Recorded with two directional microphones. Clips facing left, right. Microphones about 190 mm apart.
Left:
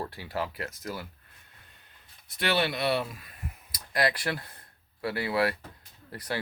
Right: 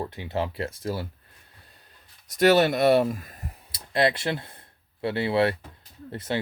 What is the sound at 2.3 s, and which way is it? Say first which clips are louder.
Speech: right 9 dB; 45° right (ahead or behind).